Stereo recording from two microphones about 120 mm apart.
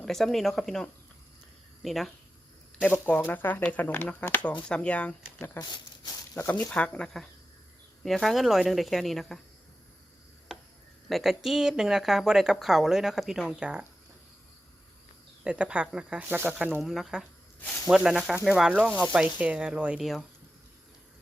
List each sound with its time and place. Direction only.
0.0 s speech: centre (ahead or behind)
2.8 s speech: 15° left (ahead or behind)
5.5 s speech: 40° left (ahead or behind)
6.3 s speech: 15° left (ahead or behind)
11.1 s speech: centre (ahead or behind)
15.4 s speech: 10° right (ahead or behind)